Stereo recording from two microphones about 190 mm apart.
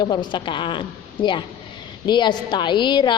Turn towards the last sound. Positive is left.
turn(degrees=25)  # may be behind; listen again after turning